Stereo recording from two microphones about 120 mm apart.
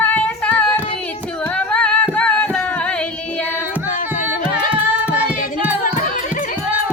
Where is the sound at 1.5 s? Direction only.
10° left (ahead or behind).